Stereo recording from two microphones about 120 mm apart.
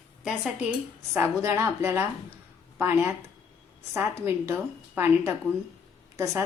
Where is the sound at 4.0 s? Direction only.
20° right (ahead or behind).